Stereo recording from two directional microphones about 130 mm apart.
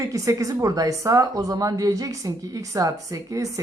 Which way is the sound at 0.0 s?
25° right (ahead or behind).